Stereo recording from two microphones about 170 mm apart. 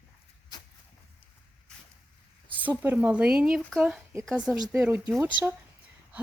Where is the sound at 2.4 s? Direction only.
10° right (ahead or behind).